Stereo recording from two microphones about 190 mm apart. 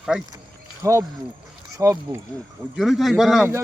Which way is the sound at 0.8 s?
15° right (ahead or behind).